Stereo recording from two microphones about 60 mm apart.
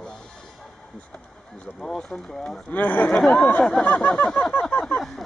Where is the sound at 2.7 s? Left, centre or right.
Left.